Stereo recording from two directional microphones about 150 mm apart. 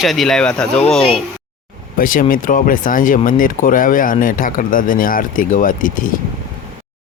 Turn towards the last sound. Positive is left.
turn(degrees=65)  # may be behind; listen again after turning